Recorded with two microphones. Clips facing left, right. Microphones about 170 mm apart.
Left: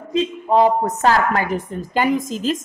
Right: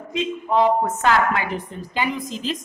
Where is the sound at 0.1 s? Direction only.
35° left (ahead or behind).